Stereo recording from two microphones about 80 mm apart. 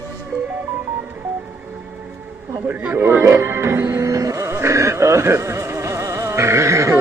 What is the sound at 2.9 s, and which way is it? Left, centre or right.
Music, right.